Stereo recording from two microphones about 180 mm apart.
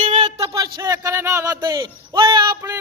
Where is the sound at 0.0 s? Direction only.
35° right (ahead or behind).